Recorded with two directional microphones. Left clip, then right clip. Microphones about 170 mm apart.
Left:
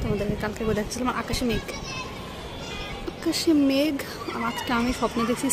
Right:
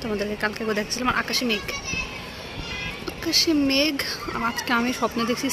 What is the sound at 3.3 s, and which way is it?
Speech, 15° left (ahead or behind).